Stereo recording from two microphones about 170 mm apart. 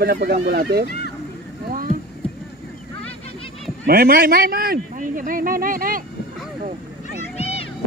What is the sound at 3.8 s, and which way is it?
Speech, 60° right (ahead or behind).